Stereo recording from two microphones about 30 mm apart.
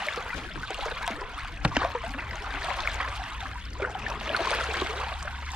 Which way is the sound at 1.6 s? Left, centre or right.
Right.